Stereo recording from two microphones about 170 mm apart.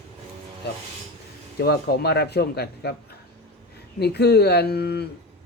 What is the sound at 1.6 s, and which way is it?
Speech, 70° left (ahead or behind).